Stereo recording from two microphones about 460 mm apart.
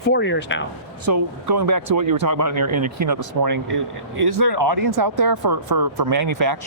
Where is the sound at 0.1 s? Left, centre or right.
Left.